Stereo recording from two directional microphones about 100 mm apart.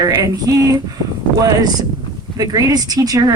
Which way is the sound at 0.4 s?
35° right (ahead or behind).